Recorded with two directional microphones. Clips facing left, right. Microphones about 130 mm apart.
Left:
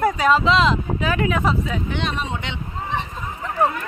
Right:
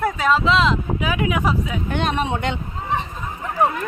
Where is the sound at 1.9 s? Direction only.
50° right (ahead or behind).